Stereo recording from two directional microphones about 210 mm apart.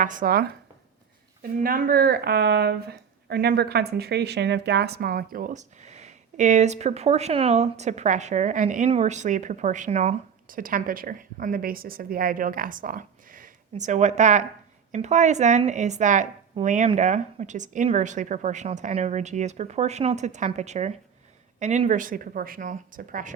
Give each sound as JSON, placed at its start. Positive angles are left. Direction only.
{"t": 0.0, "sound": "speech", "side_deg": -40}